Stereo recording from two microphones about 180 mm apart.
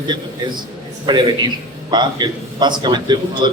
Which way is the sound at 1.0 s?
25° right (ahead or behind).